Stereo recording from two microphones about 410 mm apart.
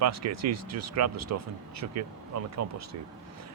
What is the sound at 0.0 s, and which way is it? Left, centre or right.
Speech, right.